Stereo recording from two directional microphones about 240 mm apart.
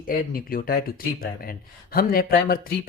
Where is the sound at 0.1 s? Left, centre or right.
Left.